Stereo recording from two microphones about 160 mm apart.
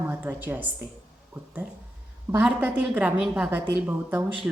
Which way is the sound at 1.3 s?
20° right (ahead or behind).